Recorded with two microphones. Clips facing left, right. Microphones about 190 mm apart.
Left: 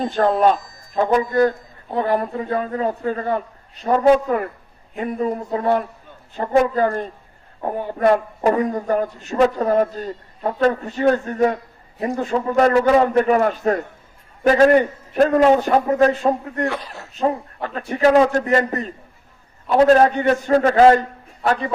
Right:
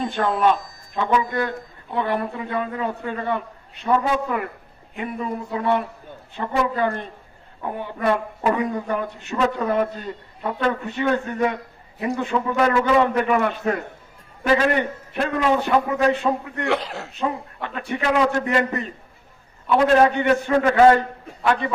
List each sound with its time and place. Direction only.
0.0 s a man's voice: 40° left (ahead or behind)
16.6 s speech: 80° right
17.2 s a man's voice: 40° left (ahead or behind)